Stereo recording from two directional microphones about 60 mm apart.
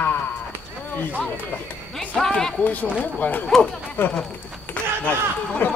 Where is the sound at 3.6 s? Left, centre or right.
Centre.